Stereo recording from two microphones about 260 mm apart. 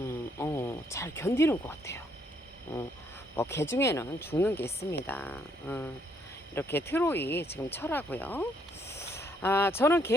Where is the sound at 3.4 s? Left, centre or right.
Centre.